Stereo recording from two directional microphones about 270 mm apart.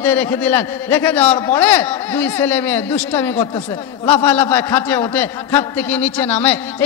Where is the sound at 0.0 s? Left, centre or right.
Centre.